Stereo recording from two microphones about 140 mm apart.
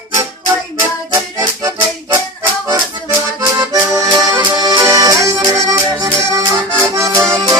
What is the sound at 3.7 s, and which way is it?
Accordion, 25° right (ahead or behind).